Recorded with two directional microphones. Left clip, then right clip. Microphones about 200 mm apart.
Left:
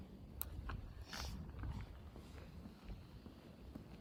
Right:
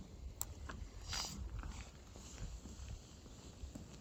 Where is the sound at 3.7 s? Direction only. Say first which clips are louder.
Right 1 dB; 40° right (ahead or behind).